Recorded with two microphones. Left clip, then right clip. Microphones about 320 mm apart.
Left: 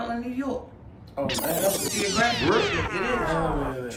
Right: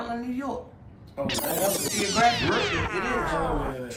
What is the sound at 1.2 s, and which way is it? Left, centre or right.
Music, centre.